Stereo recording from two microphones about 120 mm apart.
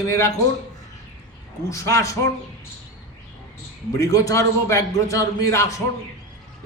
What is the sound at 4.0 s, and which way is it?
A man's voice, 25° left (ahead or behind).